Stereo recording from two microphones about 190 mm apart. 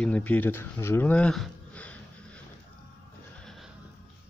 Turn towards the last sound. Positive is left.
turn(degrees=0)  # may be behind; listen again after turning